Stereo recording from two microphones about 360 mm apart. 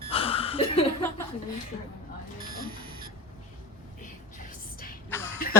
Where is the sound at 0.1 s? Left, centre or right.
Centre.